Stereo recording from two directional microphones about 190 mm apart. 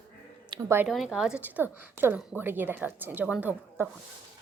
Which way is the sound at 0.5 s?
15° right (ahead or behind).